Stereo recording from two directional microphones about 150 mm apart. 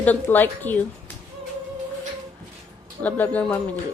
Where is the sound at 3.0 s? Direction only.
10° left (ahead or behind).